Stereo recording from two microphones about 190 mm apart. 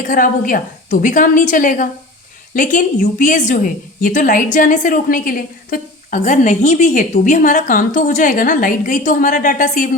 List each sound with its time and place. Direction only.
0.0 s a woman's voice: 45° left (ahead or behind)